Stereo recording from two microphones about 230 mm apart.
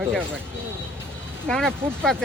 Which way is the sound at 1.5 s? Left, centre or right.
Centre.